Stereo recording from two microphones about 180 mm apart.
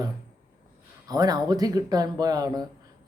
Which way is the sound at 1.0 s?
20° right (ahead or behind).